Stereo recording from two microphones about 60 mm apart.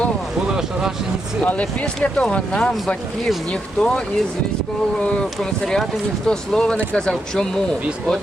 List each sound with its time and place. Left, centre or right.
0.4 s speech: centre
1.5 s speech: left
5.0 s speech: centre